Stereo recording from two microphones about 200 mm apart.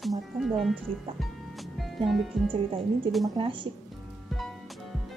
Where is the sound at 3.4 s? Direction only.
25° right (ahead or behind).